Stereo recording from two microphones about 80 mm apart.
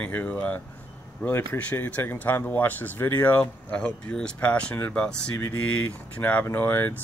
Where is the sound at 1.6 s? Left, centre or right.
Centre.